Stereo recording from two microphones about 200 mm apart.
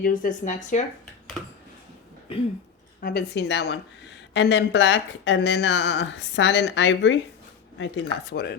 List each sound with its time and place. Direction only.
0.0 s speech: 45° left (ahead or behind)
3.0 s speech: 55° left (ahead or behind)